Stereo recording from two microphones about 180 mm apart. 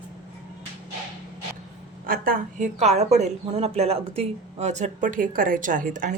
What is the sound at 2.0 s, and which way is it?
A woman's voice, 55° right (ahead or behind).